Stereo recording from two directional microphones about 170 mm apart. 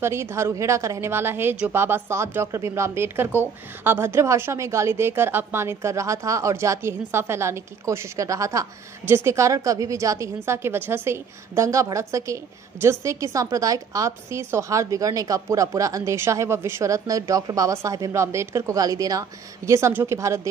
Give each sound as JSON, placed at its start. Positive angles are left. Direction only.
{"t": 0.0, "sound": "a woman's voice", "side_deg": -15}